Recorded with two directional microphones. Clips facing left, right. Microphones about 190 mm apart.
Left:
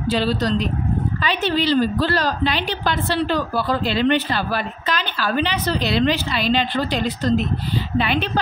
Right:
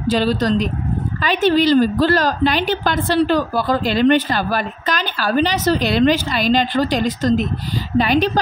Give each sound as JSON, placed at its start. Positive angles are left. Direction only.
{"t": 0.1, "sound": "a woman's voice", "side_deg": -45}